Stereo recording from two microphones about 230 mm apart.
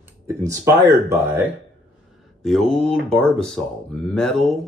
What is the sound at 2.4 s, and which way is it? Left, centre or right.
Speech, centre.